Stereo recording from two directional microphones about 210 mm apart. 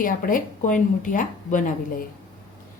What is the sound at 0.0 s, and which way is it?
Speech, 40° left (ahead or behind).